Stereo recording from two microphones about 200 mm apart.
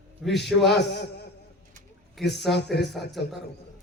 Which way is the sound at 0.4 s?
Centre (ahead or behind).